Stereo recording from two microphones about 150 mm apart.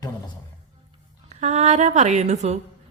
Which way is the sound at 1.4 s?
50° right (ahead or behind).